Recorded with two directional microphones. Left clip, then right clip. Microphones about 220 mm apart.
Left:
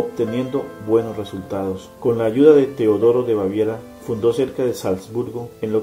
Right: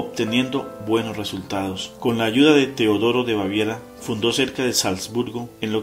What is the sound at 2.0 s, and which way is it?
Speech, 45° right (ahead or behind).